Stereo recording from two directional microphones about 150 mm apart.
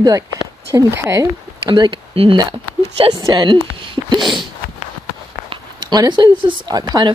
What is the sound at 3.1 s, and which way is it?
Speech, 25° right (ahead or behind).